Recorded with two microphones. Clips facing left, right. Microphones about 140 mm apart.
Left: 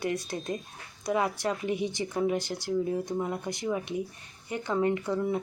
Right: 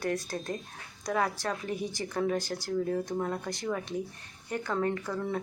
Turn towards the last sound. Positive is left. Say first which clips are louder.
# left 4 dB
turn(degrees=15)  # may be behind; listen again after turning